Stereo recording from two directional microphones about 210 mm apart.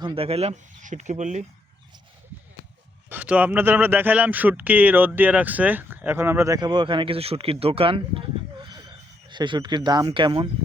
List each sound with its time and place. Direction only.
0.0 s speech: 25° right (ahead or behind)
3.1 s speech: 5° right (ahead or behind); by 8.2 s 25° right (ahead or behind)
8.6 s a sound: 20° right (ahead or behind)
9.3 s speech: 20° right (ahead or behind)